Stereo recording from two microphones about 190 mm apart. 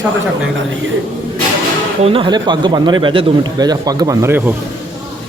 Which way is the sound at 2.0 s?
30° right (ahead or behind).